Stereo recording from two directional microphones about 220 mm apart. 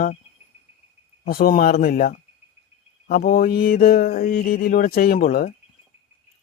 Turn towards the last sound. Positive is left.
turn(degrees=40)  # may be behind; listen again after turning